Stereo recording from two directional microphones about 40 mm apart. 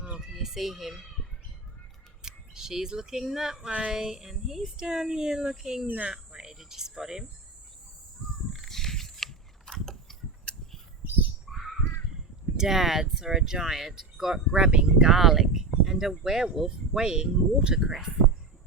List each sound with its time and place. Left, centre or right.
0.4 s speech: centre
2.2 s speech: centre
3.7 s a sound: right
3.9 s speech: centre
8.5 s a sound: centre
11.4 s crow: centre
12.5 s speech: centre
14.5 s speech: right
17.7 s speech: centre